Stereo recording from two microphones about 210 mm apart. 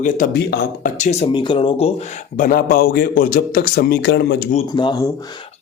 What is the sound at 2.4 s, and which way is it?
Speech, 40° left (ahead or behind).